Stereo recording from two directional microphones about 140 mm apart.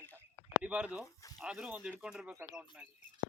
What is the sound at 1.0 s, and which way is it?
Speech, 25° left (ahead or behind).